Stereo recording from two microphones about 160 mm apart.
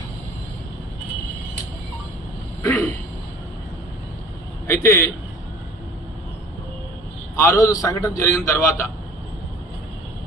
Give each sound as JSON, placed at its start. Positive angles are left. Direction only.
{"t": 2.6, "sound": "a sound", "side_deg": 10}
{"t": 4.6, "sound": "a man's voice", "side_deg": 15}
{"t": 7.3, "sound": "a man's voice", "side_deg": 20}